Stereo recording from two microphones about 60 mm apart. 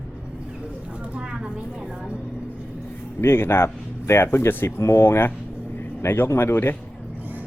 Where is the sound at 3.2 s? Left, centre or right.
Left.